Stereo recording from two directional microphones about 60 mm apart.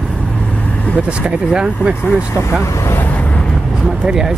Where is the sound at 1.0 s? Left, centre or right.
Centre.